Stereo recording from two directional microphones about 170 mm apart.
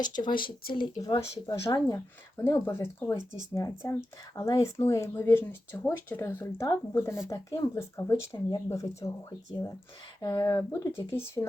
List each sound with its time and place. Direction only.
0.0 s speech: 55° left (ahead or behind)
1.0 s speech: 25° left (ahead or behind)